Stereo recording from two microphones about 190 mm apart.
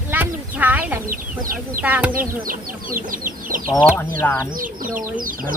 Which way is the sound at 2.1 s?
45° right (ahead or behind).